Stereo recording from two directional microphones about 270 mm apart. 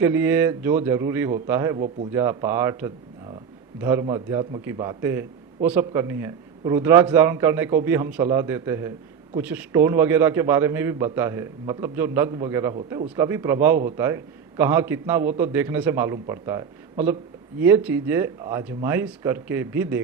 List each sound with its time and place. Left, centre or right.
0.0 s a man's voice: centre
13.1 s a man's voice: centre